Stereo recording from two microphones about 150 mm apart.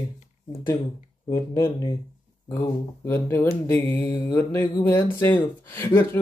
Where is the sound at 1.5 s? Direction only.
20° left (ahead or behind).